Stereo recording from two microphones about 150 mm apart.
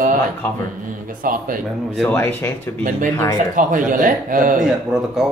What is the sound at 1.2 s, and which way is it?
Speech, 65° right (ahead or behind).